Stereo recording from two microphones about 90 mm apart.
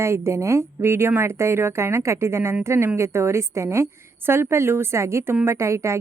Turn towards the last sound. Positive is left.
turn(degrees=-30)  # may be behind; listen again after turning